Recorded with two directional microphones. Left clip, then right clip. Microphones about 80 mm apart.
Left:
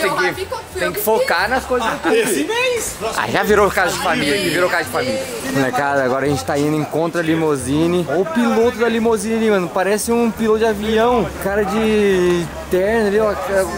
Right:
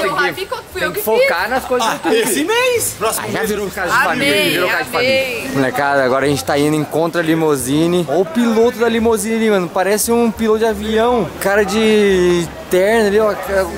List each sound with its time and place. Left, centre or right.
0.0 s a sound: centre
0.8 s speech: centre
2.5 s speech: right
3.8 s speech: centre
4.2 s speech: right
5.6 s speech: centre
11.4 s speech: centre